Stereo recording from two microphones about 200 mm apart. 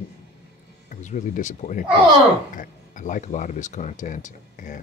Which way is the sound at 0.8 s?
40° left (ahead or behind).